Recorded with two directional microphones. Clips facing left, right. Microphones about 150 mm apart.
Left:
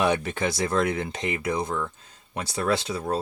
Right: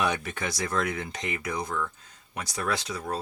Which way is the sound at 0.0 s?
30° left (ahead or behind).